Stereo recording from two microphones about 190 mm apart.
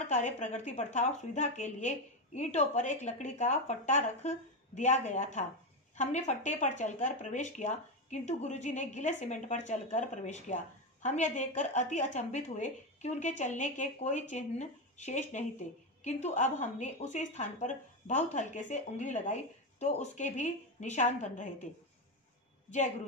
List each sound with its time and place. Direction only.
0.0 s speech: 40° left (ahead or behind)